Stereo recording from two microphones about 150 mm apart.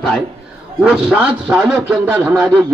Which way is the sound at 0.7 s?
5° right (ahead or behind).